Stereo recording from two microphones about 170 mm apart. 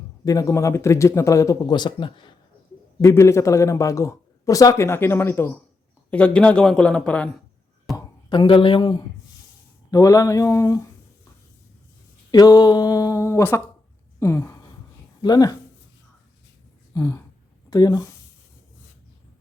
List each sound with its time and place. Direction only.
0.3 s speech: 20° left (ahead or behind)
3.0 s a man's voice: 15° left (ahead or behind)
7.9 s speech: 30° left (ahead or behind)
12.3 s a sound: 25° left (ahead or behind)
15.2 s speech: 20° left (ahead or behind)
16.9 s speech: 20° left (ahead or behind)